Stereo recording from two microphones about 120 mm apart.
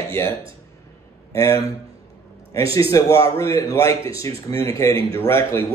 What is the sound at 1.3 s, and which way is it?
Speech, 25° left (ahead or behind).